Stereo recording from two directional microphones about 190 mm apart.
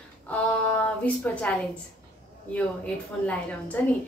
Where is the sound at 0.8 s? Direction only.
5° left (ahead or behind).